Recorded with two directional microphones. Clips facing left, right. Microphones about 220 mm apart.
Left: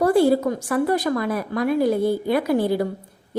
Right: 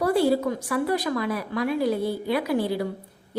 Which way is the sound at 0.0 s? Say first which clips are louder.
Left 4 dB; 45° left (ahead or behind).